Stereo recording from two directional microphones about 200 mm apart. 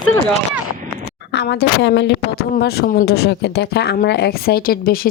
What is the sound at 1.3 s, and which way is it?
A woman's voice, 55° left (ahead or behind).